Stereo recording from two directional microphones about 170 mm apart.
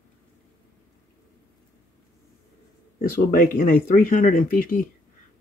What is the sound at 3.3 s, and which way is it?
Speech, 55° left (ahead or behind).